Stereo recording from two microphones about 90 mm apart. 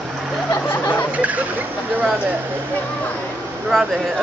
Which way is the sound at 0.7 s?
20° left (ahead or behind).